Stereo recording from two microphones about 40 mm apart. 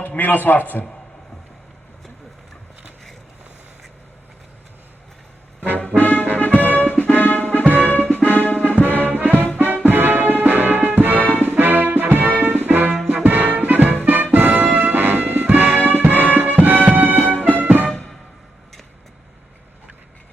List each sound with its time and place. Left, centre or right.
0.2 s a man's voice: left
6.0 s music: left
9.0 s music: right